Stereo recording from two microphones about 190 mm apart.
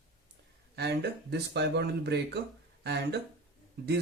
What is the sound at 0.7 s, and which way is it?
Speech, 60° right (ahead or behind).